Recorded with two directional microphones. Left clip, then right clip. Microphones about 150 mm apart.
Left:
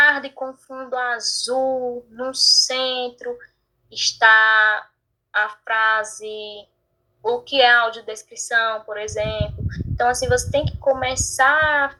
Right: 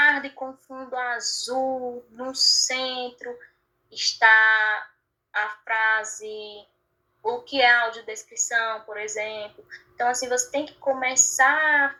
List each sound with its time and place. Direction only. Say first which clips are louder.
0.0 s a woman's voice: left 4 dB; 10° right (ahead or behind)
2.4 s a sound: left 5 dB; 20° left (ahead or behind)
2.6 s a woman's voice: left 5 dB; 10° right (ahead or behind)
4.2 s a woman's voice: left 3 dB; 10° right (ahead or behind)